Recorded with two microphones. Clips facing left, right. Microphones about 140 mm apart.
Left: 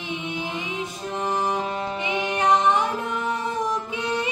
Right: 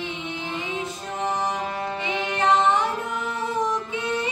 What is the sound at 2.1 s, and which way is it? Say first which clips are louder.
Music: left 1 dB; 15° left (ahead or behind).